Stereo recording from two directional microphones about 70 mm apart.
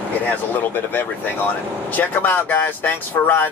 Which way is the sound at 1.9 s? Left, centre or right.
Left.